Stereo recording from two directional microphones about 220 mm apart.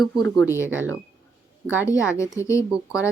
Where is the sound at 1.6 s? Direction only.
10° left (ahead or behind).